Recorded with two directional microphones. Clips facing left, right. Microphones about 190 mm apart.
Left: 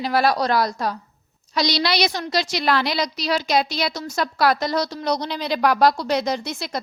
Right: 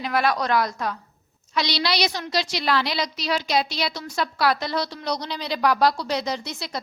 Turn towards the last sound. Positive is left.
turn(degrees=50)  # may be behind; listen again after turning